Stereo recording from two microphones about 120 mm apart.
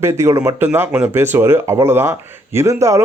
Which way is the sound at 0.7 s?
10° right (ahead or behind).